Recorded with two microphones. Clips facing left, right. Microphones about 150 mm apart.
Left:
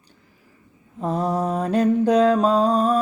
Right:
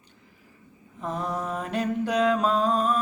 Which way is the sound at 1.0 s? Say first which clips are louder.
Left 7 dB; 35° left (ahead or behind).